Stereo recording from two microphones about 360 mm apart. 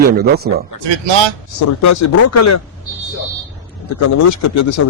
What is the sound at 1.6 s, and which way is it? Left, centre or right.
Speech, left.